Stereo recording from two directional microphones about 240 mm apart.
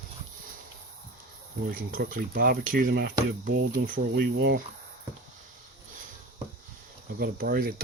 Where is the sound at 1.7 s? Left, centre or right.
Right.